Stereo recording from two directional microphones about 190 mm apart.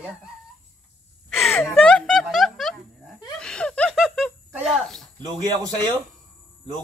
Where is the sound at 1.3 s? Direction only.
Centre (ahead or behind).